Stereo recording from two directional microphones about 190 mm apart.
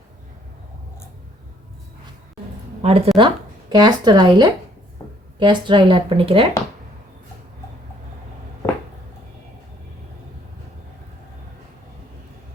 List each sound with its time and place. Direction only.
2.8 s speech: 30° right (ahead or behind)